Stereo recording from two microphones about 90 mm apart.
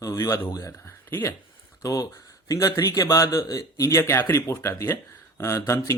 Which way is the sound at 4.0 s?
25° left (ahead or behind).